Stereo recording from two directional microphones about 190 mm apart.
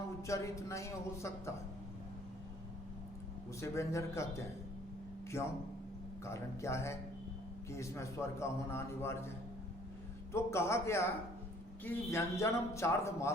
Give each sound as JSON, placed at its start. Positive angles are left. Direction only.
{"t": 0.3, "sound": "a man's voice", "side_deg": 15}
{"t": 3.6, "sound": "a man's voice", "side_deg": 15}
{"t": 10.3, "sound": "a man's voice", "side_deg": 15}